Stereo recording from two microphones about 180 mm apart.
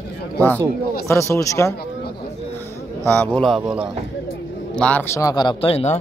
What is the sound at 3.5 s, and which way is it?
Speech, 5° right (ahead or behind).